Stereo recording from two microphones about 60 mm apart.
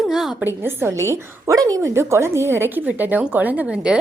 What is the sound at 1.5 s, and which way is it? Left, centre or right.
Speech, right.